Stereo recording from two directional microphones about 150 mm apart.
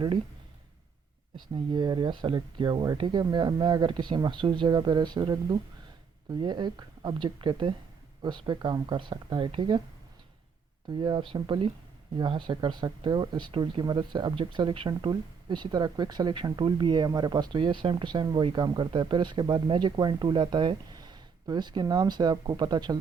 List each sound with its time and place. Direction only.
1.7 s speech: 30° right (ahead or behind)
11.0 s speech: 35° right (ahead or behind)